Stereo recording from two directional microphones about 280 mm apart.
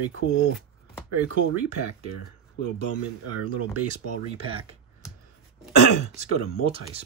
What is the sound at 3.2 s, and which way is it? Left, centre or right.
Speech, right.